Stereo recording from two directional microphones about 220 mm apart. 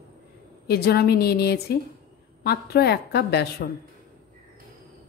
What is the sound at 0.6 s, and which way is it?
A woman's voice, 45° left (ahead or behind).